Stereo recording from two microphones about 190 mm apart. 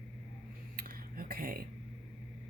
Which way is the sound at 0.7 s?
50° right (ahead or behind).